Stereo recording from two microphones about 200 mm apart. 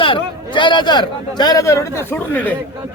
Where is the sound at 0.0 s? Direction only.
25° left (ahead or behind).